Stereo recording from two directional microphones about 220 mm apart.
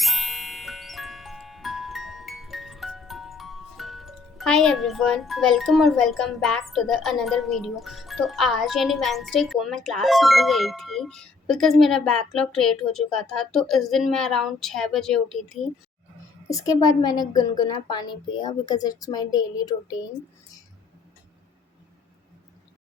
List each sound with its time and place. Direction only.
0.0 s music: centre (ahead or behind)
16.5 s a woman's voice: 15° left (ahead or behind)